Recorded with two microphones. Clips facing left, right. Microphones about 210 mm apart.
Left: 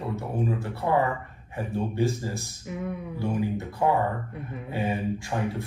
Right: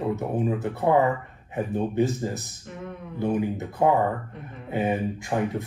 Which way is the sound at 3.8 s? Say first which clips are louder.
Right 3 dB; 20° right (ahead or behind).